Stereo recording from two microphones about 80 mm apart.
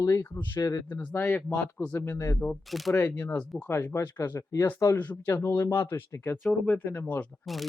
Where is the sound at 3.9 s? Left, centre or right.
Left.